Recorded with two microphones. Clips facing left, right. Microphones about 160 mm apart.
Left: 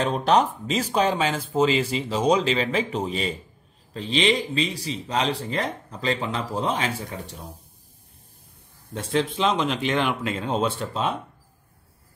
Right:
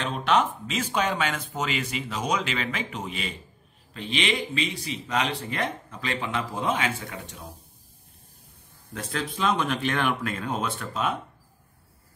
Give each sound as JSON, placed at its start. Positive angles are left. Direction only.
{"t": 0.0, "sound": "speech", "side_deg": 40}
{"t": 8.9, "sound": "speech", "side_deg": 25}